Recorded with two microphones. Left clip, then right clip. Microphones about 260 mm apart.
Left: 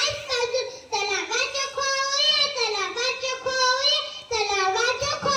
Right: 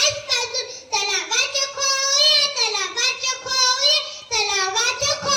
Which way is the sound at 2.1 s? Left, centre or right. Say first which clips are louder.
Right 6 dB; right.